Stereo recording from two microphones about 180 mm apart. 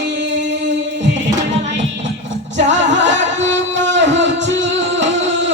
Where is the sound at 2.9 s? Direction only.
90° right.